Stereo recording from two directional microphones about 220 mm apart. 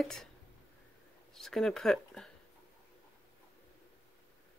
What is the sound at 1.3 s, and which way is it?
Speech, centre (ahead or behind).